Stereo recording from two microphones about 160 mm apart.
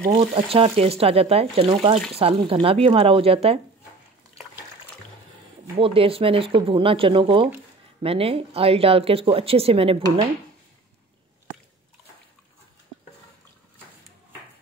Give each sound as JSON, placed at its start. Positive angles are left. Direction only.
{"t": 0.2, "sound": "speech", "side_deg": -35}
{"t": 5.8, "sound": "speech", "side_deg": -35}